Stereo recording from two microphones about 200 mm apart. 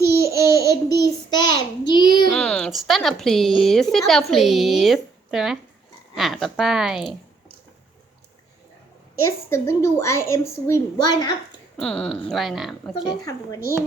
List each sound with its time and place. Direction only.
0.3 s child singing: 50° right (ahead or behind)
1.3 s a sound: 20° left (ahead or behind)
2.3 s a woman's voice: 5° left (ahead or behind)
9.1 s a woman's voice: 15° left (ahead or behind)
11.8 s a woman's voice: 5° left (ahead or behind)
13.1 s a woman's voice: 15° left (ahead or behind)